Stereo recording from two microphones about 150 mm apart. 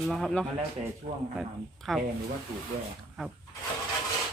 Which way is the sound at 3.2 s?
Centre (ahead or behind).